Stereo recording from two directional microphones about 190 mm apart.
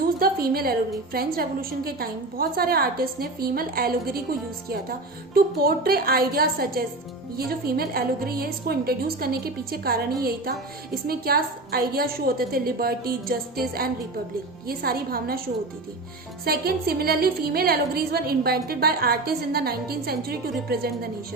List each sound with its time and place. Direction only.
0.0 s a woman's voice: 50° right (ahead or behind)
16.5 s a woman's voice: 55° right (ahead or behind)